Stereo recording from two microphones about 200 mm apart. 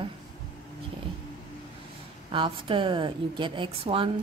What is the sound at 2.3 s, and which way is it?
Speech, 25° right (ahead or behind).